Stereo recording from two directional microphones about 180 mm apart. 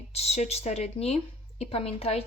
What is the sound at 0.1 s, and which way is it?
Speech, 35° left (ahead or behind).